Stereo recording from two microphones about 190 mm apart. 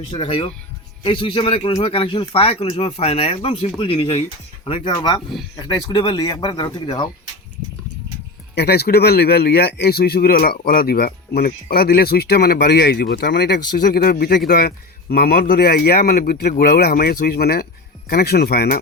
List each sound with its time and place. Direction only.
0.1 s speech: 25° left (ahead or behind)
8.5 s a man's voice: 60° left (ahead or behind)